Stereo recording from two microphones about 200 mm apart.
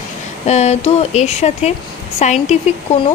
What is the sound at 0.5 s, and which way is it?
Speech, 35° left (ahead or behind).